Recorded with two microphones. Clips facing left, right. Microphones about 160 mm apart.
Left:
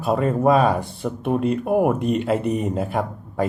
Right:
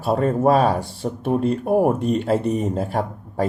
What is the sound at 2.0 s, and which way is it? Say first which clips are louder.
Speech: right 1 dB; centre (ahead or behind).